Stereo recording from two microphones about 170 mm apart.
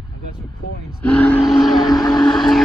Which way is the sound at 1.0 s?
10° left (ahead or behind).